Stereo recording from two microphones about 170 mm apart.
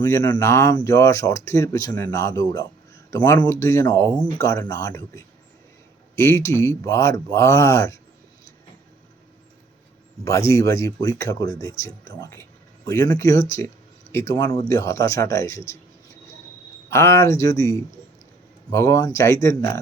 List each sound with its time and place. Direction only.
0.1 s speech: 20° left (ahead or behind)
10.2 s speech: 15° left (ahead or behind)
16.9 s speech: 15° left (ahead or behind)